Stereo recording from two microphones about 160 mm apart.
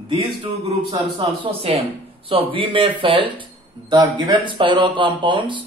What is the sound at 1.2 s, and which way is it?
Speech, 35° right (ahead or behind).